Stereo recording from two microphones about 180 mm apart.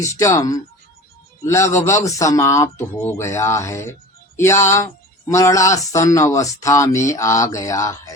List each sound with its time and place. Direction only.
0.0 s speech: 15° left (ahead or behind)